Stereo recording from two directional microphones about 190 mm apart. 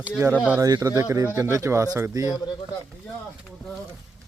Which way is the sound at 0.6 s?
20° right (ahead or behind).